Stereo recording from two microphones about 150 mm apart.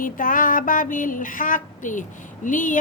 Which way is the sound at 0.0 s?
65° left (ahead or behind).